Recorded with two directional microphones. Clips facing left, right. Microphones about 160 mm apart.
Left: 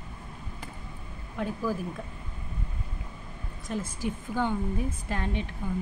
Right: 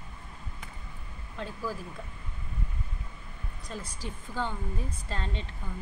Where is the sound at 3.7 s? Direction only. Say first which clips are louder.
Left 8 dB; 20° left (ahead or behind).